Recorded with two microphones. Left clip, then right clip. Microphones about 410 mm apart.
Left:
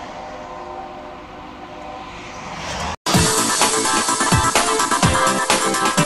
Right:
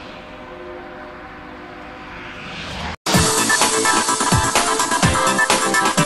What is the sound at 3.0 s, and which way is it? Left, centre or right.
Music, centre.